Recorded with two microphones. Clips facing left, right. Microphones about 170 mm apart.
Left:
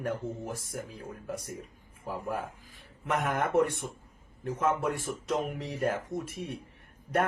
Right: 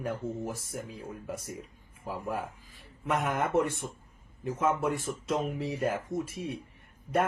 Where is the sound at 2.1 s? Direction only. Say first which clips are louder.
Even; centre (ahead or behind).